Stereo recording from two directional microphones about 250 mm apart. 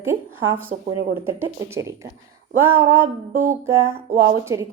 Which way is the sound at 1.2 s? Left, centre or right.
Centre.